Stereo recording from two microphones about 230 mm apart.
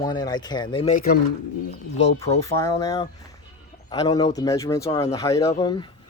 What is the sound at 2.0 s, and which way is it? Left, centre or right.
Speech, centre.